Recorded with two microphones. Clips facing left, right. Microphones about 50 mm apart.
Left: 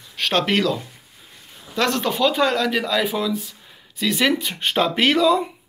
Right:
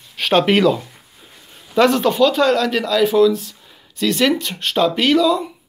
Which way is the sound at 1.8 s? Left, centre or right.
Centre.